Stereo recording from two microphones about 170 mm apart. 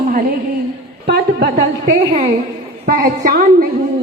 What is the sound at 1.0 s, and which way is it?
Speech, 75° right (ahead or behind).